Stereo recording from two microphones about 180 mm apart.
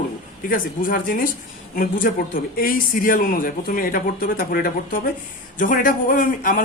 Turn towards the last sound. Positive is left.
turn(degrees=50)  # may be behind; listen again after turning